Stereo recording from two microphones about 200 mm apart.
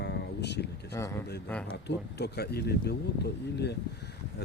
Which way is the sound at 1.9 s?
55° left (ahead or behind).